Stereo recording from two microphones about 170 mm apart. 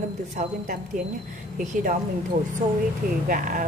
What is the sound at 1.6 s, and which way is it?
A woman's voice, 50° right (ahead or behind).